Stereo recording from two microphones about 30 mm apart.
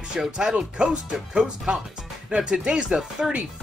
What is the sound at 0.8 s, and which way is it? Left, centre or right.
Speech, right.